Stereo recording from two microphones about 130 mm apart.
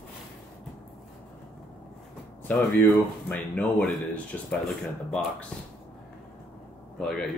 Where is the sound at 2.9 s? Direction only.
5° left (ahead or behind).